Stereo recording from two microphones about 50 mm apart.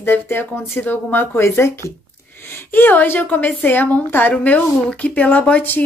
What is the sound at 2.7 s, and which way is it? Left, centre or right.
A woman's voice, left.